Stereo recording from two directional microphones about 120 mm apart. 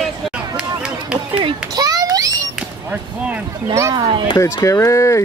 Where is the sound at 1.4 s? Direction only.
30° right (ahead or behind).